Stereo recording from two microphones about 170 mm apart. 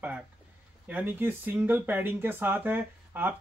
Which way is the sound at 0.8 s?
10° right (ahead or behind).